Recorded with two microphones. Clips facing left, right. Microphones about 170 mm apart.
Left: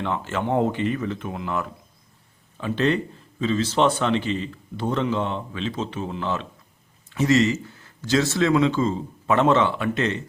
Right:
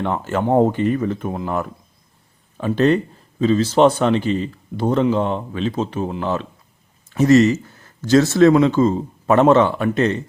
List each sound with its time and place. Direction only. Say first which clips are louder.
0.0 s a man's voice: right 5 dB; 45° right (ahead or behind)